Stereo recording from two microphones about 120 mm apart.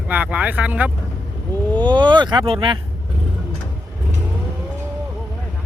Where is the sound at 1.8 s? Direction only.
40° right (ahead or behind).